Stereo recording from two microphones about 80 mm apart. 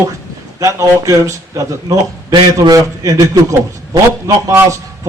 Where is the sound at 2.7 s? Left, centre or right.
Right.